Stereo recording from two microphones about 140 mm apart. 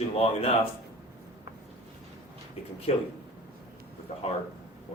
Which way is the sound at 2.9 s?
45° left (ahead or behind).